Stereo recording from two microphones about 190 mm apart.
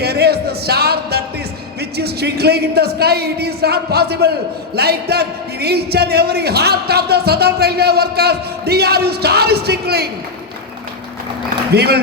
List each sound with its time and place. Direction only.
0.0 s music: 55° right (ahead or behind)
1.8 s a man's voice: 60° right (ahead or behind)
11.7 s a man's voice: 60° right (ahead or behind)